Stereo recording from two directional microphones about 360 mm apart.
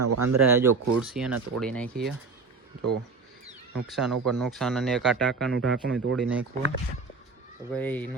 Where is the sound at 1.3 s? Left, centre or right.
Right.